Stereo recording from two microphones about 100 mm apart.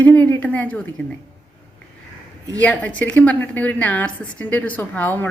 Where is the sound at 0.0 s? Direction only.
15° left (ahead or behind).